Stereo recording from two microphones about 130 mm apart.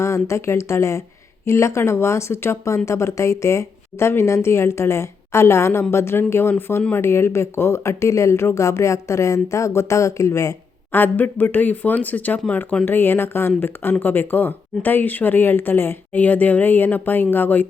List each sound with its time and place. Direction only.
0.0 s speech: 20° left (ahead or behind)